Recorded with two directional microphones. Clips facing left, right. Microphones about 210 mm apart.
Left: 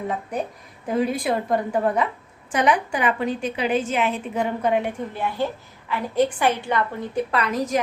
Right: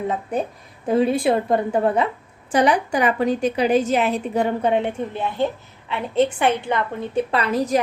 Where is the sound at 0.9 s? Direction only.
30° right (ahead or behind).